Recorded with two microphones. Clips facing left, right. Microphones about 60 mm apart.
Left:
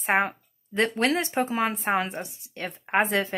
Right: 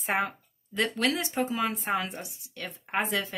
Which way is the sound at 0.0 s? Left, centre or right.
Left.